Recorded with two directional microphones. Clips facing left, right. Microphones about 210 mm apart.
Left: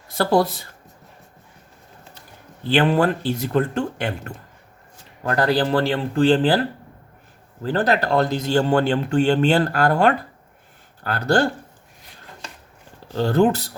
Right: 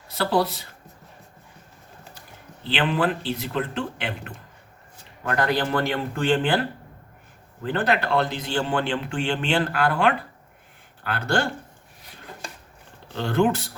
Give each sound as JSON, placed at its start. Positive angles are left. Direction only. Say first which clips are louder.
{"t": 0.1, "sound": "speech", "louder": "left 4 dB", "side_deg": 45}
{"t": 2.6, "sound": "speech", "louder": "left 6 dB", "side_deg": 45}
{"t": 5.2, "sound": "speech", "louder": "left 4 dB", "side_deg": 35}
{"t": 13.1, "sound": "speech", "louder": "left 4 dB", "side_deg": 40}